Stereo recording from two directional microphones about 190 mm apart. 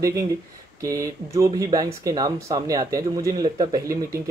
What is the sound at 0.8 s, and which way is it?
Speech, 15° right (ahead or behind).